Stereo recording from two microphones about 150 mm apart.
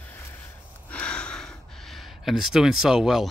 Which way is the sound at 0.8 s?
5° left (ahead or behind).